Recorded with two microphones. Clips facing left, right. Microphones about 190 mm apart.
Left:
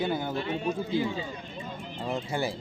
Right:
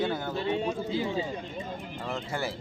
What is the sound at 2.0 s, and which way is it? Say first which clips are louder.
Speech: left 3 dB; 15° left (ahead or behind).